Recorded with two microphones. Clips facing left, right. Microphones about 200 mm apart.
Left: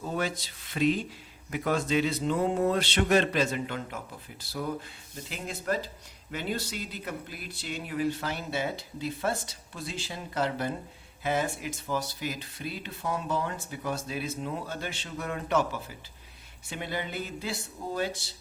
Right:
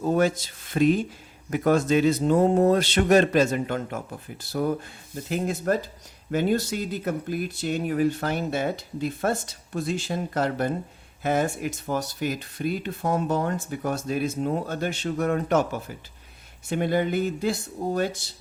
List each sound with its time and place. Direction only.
0.0 s speech: 50° right (ahead or behind)